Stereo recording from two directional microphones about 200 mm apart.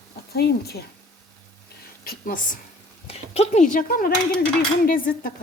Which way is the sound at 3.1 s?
30° left (ahead or behind).